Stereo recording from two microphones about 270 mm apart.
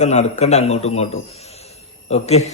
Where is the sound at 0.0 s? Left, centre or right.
Left.